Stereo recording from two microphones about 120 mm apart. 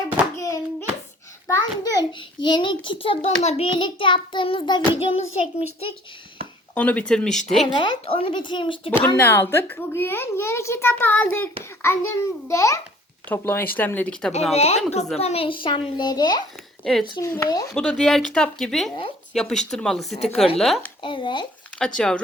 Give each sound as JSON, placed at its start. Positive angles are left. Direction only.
{"t": 0.3, "sound": "hands", "side_deg": 25}
{"t": 1.5, "sound": "a child's voice", "side_deg": 25}
{"t": 3.2, "sound": "a child's voice", "side_deg": 65}
{"t": 3.8, "sound": "a child's voice", "side_deg": 45}
{"t": 6.7, "sound": "speech", "side_deg": 10}
{"t": 7.8, "sound": "a child's voice", "side_deg": 45}
{"t": 9.1, "sound": "a child's voice", "side_deg": 20}
{"t": 13.2, "sound": "speech", "side_deg": 15}
{"t": 14.5, "sound": "a child's voice", "side_deg": 60}
{"t": 16.8, "sound": "speech", "side_deg": 5}
{"t": 17.2, "sound": "a child's voice", "side_deg": 30}
{"t": 17.7, "sound": "speech", "side_deg": 5}
{"t": 21.0, "sound": "a child's voice", "side_deg": 45}
{"t": 21.8, "sound": "speech", "side_deg": 5}